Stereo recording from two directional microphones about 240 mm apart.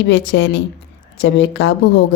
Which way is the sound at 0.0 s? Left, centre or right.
Left.